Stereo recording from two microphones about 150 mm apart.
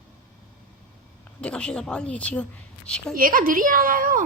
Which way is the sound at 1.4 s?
5° left (ahead or behind).